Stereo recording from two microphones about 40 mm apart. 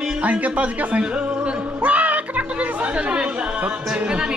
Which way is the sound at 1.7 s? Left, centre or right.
Right.